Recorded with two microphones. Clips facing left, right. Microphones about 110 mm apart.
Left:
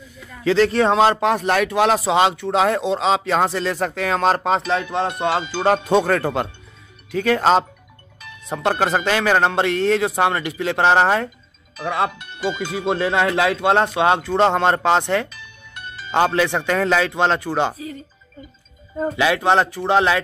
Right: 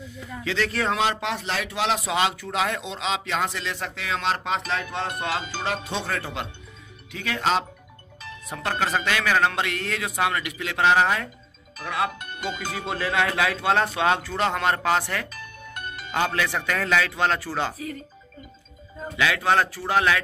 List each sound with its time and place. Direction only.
0.4 s speech: 35° left (ahead or behind)
1.1 s speech: 45° left (ahead or behind)
2.0 s speech: 30° left (ahead or behind)
5.9 s speech: 50° left (ahead or behind)
8.5 s speech: 30° left (ahead or behind)
12.1 s speech: 45° right (ahead or behind)
12.7 s speech: 25° left (ahead or behind)
15.3 s music: 50° right (ahead or behind)
16.3 s speech: 25° left (ahead or behind)
19.1 s speech: 25° left (ahead or behind)